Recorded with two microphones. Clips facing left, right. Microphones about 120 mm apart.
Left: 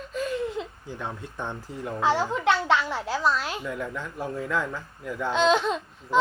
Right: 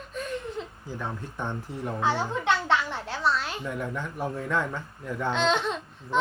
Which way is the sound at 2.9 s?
5° left (ahead or behind).